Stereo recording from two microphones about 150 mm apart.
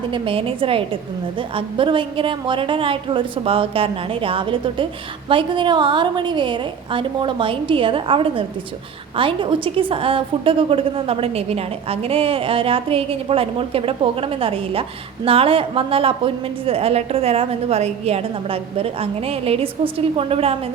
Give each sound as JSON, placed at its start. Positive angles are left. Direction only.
{"t": 0.1, "sound": "a woman's voice", "side_deg": -40}